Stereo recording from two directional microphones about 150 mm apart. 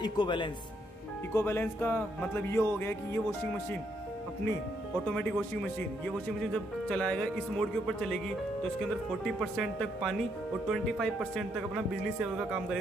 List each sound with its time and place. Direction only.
0.0 s speech: 30° left (ahead or behind)
1.3 s a man's voice: 15° left (ahead or behind)
5.1 s a man's voice: 10° left (ahead or behind)
9.2 s speech: centre (ahead or behind)